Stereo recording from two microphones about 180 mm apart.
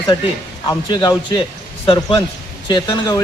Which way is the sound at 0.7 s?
25° left (ahead or behind).